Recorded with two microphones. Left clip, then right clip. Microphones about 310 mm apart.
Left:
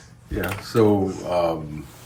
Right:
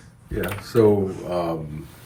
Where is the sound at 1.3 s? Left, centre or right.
Centre.